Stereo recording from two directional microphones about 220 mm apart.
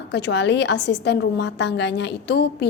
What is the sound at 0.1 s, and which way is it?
A woman's voice, 50° left (ahead or behind).